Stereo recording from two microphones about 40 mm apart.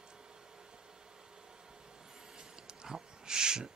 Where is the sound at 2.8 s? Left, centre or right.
Centre.